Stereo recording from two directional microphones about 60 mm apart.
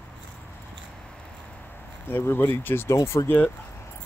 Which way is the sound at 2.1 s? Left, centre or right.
Left.